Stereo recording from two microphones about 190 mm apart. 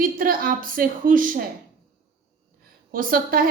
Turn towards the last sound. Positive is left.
turn(degrees=-50)  # may be behind; listen again after turning